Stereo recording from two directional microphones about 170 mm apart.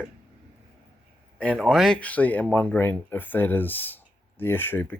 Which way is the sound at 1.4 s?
5° left (ahead or behind).